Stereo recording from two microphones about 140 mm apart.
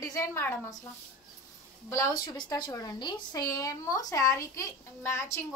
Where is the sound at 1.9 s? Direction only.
25° left (ahead or behind).